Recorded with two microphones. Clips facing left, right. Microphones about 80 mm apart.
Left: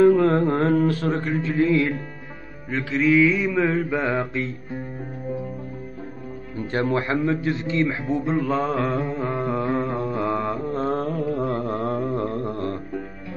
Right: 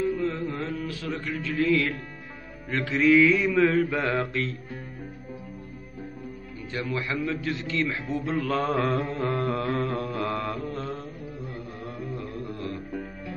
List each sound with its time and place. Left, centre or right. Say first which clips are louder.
0.0 s music: left 11 dB; left
2.7 s mantra: left 1 dB; centre
6.5 s a man's voice: left 9 dB; left; by 10.7 s centre
10.7 s mantra: left 9 dB; left
11.1 s mantra: left 14 dB; left